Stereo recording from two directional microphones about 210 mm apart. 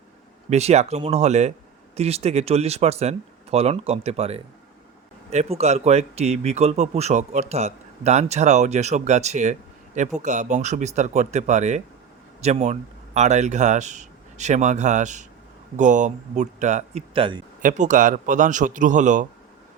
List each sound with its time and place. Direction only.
0.5 s speech: 30° right (ahead or behind)
17.6 s speech: 35° right (ahead or behind)